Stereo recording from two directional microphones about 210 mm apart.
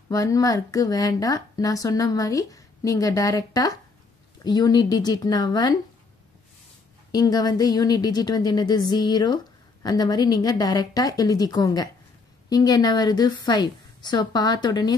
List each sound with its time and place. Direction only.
0.1 s speech: 15° left (ahead or behind)
7.1 s a woman's voice: 20° left (ahead or behind)